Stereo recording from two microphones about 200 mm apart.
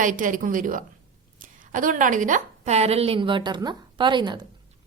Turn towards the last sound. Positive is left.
turn(degrees=-25)  # may be behind; listen again after turning